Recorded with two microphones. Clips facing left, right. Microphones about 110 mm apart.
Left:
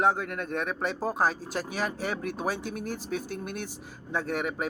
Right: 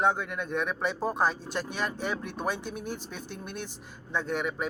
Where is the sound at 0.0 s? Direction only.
Centre (ahead or behind).